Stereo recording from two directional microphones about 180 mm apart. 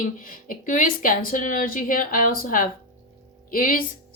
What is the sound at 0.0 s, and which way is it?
Speech, 50° left (ahead or behind).